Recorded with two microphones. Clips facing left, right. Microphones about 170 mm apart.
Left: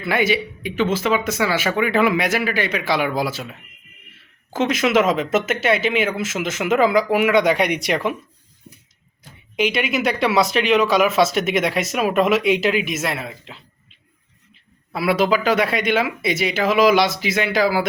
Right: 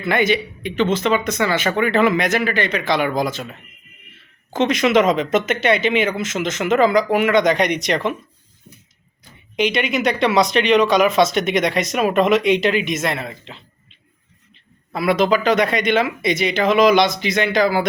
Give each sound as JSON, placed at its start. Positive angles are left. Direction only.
{"t": 0.0, "sound": "speech", "side_deg": 5}
{"t": 9.6, "sound": "speech", "side_deg": 5}
{"t": 14.9, "sound": "speech", "side_deg": 5}